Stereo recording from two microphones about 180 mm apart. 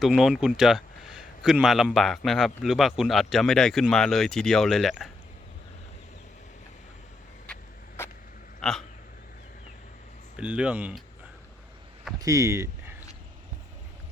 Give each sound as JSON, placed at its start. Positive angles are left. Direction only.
{"t": 0.0, "sound": "a man's voice", "side_deg": -5}
{"t": 7.4, "sound": "vehicle", "side_deg": 10}
{"t": 8.6, "sound": "a man's voice", "side_deg": 5}
{"t": 10.3, "sound": "a man's voice", "side_deg": -5}
{"t": 12.2, "sound": "speech", "side_deg": -15}